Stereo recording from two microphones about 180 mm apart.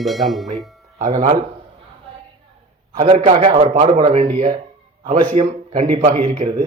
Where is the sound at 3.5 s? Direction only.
30° right (ahead or behind).